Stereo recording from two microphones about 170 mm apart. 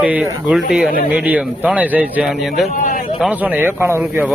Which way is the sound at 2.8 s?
55° left (ahead or behind).